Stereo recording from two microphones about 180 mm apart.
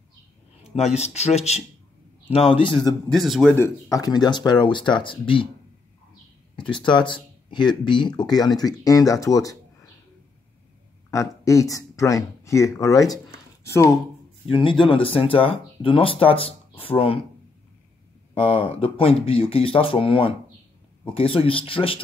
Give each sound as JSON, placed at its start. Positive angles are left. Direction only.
{"t": 0.8, "sound": "speech", "side_deg": 35}
{"t": 3.1, "sound": "speech", "side_deg": 0}
{"t": 3.5, "sound": "speech", "side_deg": 15}
{"t": 6.5, "sound": "speech", "side_deg": 25}
{"t": 11.1, "sound": "speech", "side_deg": 15}
{"t": 14.5, "sound": "speech", "side_deg": 25}
{"t": 18.3, "sound": "speech", "side_deg": 30}